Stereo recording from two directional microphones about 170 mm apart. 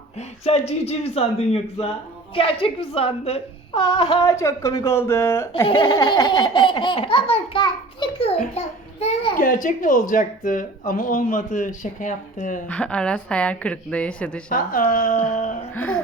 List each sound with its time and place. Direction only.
0.2 s speech: 40° left (ahead or behind)
2.3 s laughter: 35° left (ahead or behind); by 5.6 s 15° left (ahead or behind)
5.6 s laughter: 30° left (ahead or behind)
9.4 s speech: 50° left (ahead or behind)
12.6 s a woman's voice: 5° left (ahead or behind)
14.5 s speech: 55° left (ahead or behind)
15.7 s a woman's voice: 10° left (ahead or behind)